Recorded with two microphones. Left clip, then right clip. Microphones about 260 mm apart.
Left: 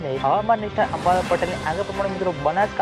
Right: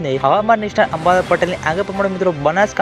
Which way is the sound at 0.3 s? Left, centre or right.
Right.